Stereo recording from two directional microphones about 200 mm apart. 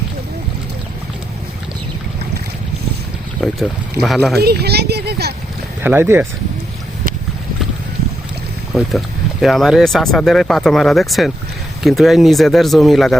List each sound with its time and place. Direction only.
3.4 s speech: centre (ahead or behind)
4.4 s speech: 55° right (ahead or behind)
5.8 s speech: 10° right (ahead or behind)
8.7 s speech: centre (ahead or behind)